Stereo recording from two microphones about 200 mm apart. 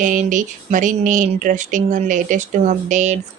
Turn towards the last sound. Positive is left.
turn(degrees=-35)  # may be behind; listen again after turning